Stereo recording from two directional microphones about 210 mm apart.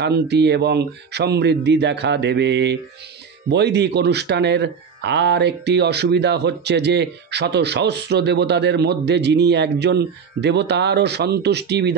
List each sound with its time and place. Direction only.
0.0 s speech: 55° right (ahead or behind)